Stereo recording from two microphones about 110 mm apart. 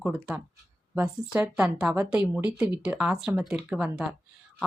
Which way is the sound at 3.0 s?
5° right (ahead or behind).